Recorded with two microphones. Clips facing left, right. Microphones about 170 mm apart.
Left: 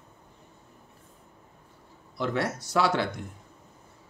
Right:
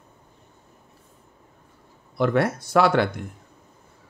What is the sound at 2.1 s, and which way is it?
Speech, 60° right (ahead or behind).